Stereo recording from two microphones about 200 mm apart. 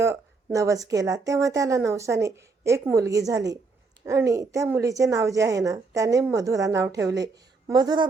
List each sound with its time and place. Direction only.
0.0 s speech: 15° right (ahead or behind)